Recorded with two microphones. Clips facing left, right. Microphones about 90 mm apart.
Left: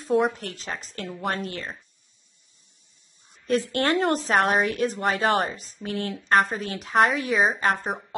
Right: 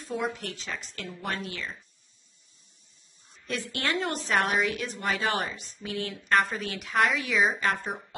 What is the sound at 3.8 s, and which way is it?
A woman's voice, 50° left (ahead or behind).